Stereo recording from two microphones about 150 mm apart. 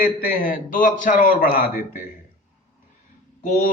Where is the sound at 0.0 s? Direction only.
70° left (ahead or behind).